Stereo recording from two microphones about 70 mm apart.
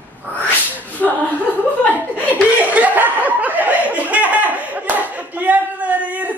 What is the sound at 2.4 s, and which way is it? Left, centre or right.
Chuckle, right.